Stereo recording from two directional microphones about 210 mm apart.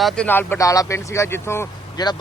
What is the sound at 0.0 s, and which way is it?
Speech, 5° left (ahead or behind).